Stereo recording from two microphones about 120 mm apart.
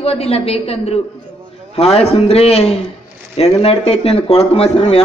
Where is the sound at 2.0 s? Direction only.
55° left (ahead or behind).